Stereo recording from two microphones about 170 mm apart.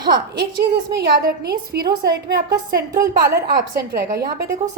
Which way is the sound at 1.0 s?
65° right (ahead or behind).